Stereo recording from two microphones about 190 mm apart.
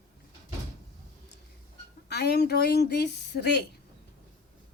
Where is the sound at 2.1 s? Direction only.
60° left (ahead or behind).